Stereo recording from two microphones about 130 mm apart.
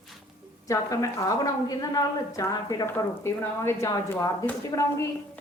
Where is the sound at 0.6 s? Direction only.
25° left (ahead or behind).